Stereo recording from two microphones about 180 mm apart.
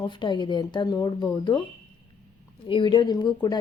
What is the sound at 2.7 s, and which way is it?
Speech, 25° left (ahead or behind).